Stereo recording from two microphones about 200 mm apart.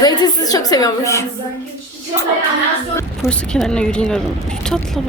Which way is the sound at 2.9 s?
5° left (ahead or behind).